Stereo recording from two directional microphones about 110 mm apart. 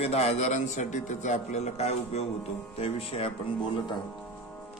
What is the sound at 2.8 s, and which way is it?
Speech, 60° left (ahead or behind).